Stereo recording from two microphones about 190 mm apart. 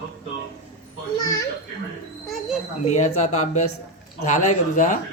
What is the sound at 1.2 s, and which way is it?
Speech, 20° left (ahead or behind).